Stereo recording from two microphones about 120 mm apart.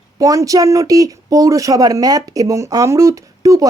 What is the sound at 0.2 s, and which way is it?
Speech, 30° right (ahead or behind).